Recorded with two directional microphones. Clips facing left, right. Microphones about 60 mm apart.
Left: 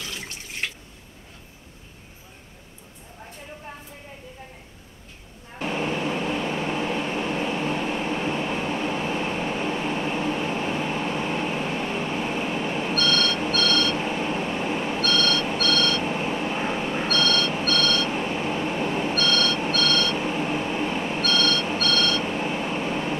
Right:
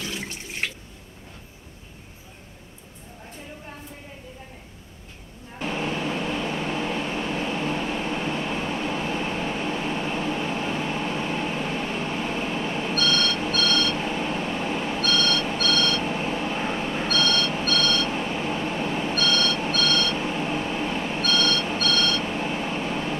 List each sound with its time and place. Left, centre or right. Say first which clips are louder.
0.0 s water: right 3 dB; right
5.6 s vehicle: left 1 dB; centre
17.5 s train: left 1 dB; centre